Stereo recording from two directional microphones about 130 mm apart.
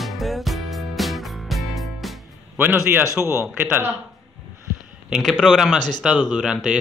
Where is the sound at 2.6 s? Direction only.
15° right (ahead or behind).